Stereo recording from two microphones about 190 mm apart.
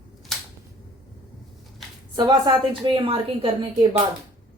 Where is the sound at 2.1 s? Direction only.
25° right (ahead or behind).